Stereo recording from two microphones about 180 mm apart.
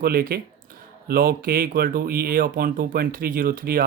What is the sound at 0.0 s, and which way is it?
Speech, 55° right (ahead or behind).